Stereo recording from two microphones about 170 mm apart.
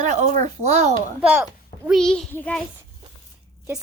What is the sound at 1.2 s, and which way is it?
Speech, 5° right (ahead or behind).